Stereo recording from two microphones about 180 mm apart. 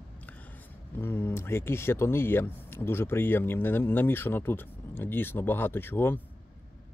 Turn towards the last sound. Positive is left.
turn(degrees=10)  # may be behind; listen again after turning